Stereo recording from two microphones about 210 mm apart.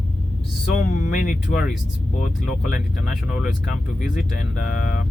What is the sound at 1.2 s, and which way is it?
Speech, 40° left (ahead or behind).